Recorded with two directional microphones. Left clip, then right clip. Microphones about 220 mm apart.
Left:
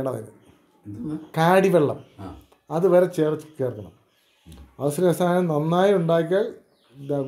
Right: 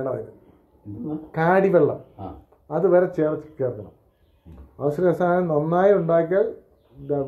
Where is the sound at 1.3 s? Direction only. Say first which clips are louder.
Even; 50° left (ahead or behind).